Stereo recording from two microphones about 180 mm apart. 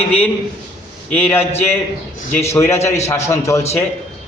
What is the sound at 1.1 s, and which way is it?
A man's voice, 10° left (ahead or behind).